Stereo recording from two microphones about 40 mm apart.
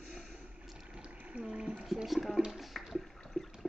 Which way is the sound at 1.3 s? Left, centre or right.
Right.